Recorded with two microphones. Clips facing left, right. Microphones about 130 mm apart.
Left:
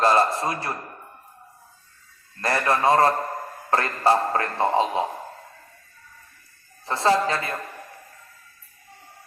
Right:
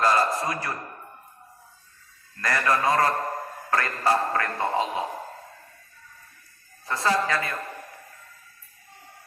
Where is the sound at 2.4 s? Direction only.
30° left (ahead or behind).